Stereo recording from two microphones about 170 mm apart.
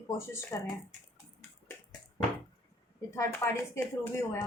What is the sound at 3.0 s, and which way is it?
Speech, 15° left (ahead or behind).